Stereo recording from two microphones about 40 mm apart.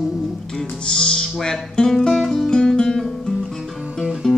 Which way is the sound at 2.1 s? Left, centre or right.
Centre.